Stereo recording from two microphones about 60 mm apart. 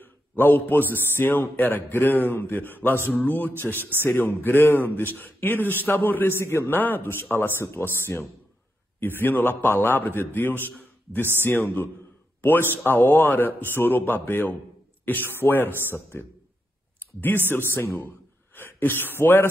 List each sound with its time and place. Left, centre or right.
0.0 s a sound: left
1.0 s speech: left
17.5 s speech: left
18.0 s gasp: left
19.1 s speech: left